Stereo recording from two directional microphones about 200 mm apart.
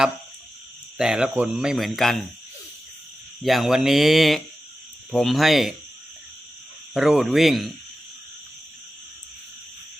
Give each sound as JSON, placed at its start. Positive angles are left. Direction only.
{"t": 0.9, "sound": "speech", "side_deg": -5}
{"t": 3.4, "sound": "speech", "side_deg": 0}
{"t": 6.9, "sound": "speech", "side_deg": 0}